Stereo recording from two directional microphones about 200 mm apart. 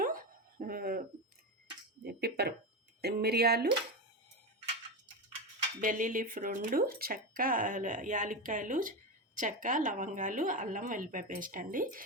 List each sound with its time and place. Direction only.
0.0 s a sound: 45° right (ahead or behind)
2.0 s speech: 55° right (ahead or behind)
5.8 s speech: 40° right (ahead or behind)